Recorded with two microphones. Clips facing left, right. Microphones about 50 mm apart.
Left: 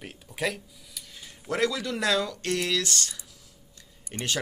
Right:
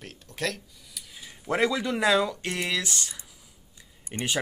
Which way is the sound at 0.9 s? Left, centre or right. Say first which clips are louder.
Right 1 dB; centre.